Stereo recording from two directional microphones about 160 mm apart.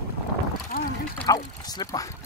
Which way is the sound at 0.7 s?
65° left (ahead or behind).